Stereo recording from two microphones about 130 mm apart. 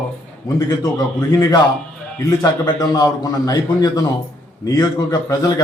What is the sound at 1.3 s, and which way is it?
A man's voice, 30° left (ahead or behind).